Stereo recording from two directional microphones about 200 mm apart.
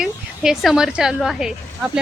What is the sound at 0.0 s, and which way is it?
A woman's voice, centre (ahead or behind).